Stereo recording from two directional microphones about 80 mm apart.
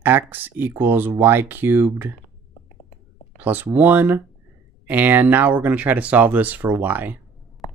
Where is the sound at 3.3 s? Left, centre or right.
Right.